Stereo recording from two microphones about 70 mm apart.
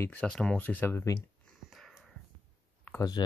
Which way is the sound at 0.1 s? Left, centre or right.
Centre.